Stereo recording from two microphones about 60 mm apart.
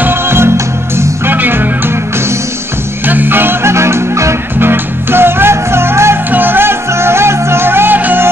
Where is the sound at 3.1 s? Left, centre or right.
Right.